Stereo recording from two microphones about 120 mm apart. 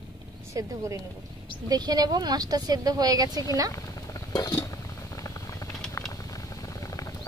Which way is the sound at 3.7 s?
30° left (ahead or behind).